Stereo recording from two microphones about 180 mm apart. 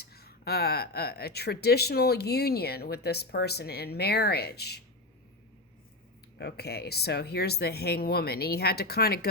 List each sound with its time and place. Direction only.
0.0 s speech: 60° left (ahead or behind)
6.4 s speech: 65° left (ahead or behind)